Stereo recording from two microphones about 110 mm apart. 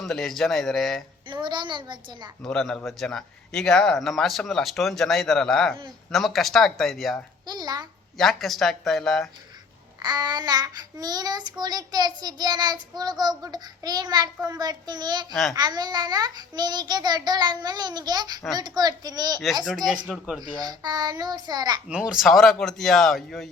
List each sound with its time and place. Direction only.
0.0 s a man's voice: centre (ahead or behind)
1.3 s a child's voice: 45° right (ahead or behind)
2.4 s a man's voice: 5° left (ahead or behind)
7.4 s child singing: 40° right (ahead or behind)
8.2 s a man's voice: centre (ahead or behind)
10.0 s child singing: 40° right (ahead or behind)
15.3 s a man's voice: centre (ahead or behind)
15.5 s child singing: 40° right (ahead or behind)
19.6 s a man's voice: 5° right (ahead or behind)
20.4 s child singing: 40° right (ahead or behind)
21.8 s a man's voice: 10° right (ahead or behind)